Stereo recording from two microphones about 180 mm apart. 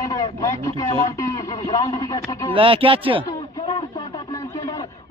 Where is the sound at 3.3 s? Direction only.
25° left (ahead or behind).